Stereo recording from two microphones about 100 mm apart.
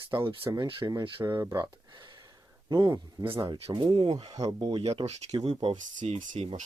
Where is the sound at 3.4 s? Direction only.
50° right (ahead or behind).